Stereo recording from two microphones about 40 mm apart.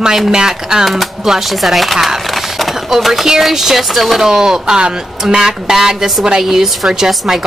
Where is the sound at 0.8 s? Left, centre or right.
Centre.